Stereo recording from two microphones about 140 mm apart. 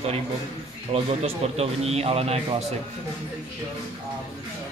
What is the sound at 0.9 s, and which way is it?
Speech, 45° right (ahead or behind).